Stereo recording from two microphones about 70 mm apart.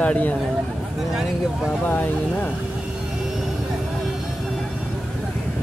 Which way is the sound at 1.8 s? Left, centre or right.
Left.